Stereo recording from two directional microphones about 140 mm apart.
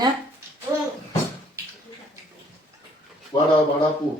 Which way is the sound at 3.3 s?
30° left (ahead or behind).